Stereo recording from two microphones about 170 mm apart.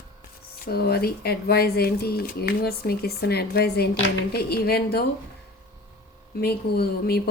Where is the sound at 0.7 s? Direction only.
65° left (ahead or behind).